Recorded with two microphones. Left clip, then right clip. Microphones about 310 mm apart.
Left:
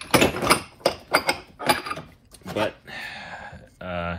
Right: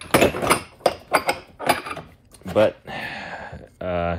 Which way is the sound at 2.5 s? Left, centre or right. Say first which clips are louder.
Right 8 dB; right.